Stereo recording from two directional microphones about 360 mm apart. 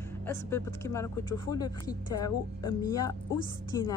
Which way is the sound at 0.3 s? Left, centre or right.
Centre.